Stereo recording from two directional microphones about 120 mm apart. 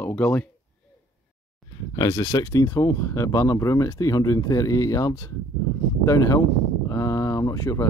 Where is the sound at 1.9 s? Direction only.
30° left (ahead or behind).